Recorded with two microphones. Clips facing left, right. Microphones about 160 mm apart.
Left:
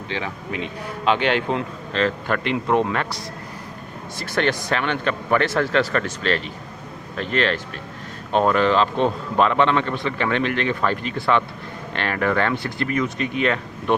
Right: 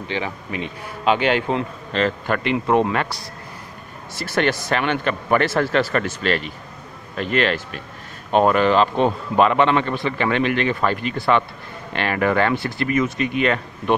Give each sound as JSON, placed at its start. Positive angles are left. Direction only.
{"t": 0.1, "sound": "speech", "side_deg": -5}
{"t": 4.2, "sound": "speech", "side_deg": -5}